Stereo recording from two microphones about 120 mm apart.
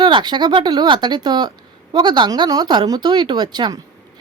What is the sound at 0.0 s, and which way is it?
Speech, 40° right (ahead or behind).